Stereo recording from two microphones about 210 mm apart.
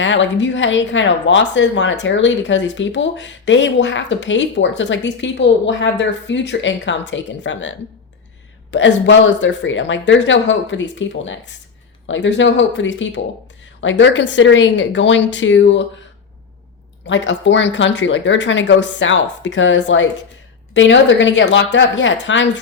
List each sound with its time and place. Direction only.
0.0 s speech: 60° left (ahead or behind)
17.1 s speech: 60° left (ahead or behind)